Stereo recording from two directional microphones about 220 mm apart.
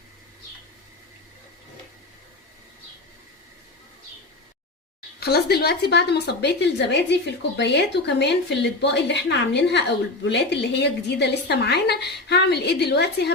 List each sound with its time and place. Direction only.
5.2 s a woman's voice: 45° left (ahead or behind)